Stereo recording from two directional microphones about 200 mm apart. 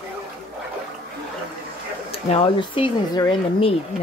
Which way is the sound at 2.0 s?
30° left (ahead or behind).